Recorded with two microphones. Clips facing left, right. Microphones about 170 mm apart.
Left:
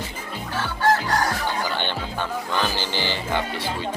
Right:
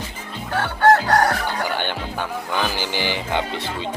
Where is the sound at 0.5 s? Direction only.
60° right (ahead or behind).